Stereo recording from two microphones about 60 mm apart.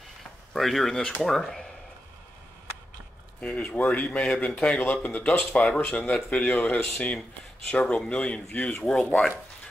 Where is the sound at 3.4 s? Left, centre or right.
Centre.